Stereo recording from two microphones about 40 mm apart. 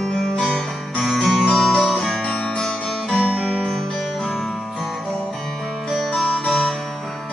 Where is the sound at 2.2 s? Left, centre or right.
Centre.